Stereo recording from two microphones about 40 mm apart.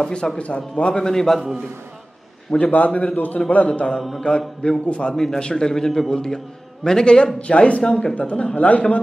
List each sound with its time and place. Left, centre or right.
0.0 s a man's voice: left; by 1.6 s centre
2.6 s a man's voice: left
5.1 s a man's voice: centre
7.3 s a man's voice: left